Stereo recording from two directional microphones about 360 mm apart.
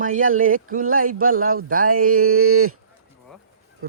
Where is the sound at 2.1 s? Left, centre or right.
Right.